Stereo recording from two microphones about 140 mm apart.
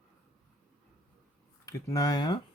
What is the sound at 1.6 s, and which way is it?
Speech, 25° left (ahead or behind).